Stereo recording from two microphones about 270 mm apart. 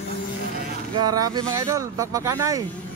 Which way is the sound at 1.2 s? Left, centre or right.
Centre.